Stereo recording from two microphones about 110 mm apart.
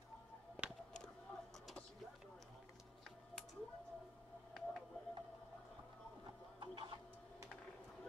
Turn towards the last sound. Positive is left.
turn(degrees=-45)  # may be behind; listen again after turning